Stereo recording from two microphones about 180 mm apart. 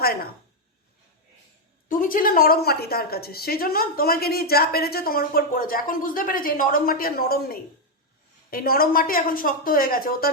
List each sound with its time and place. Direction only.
0.0 s a woman's voice: 60° left (ahead or behind)
1.9 s a woman's voice: 50° left (ahead or behind)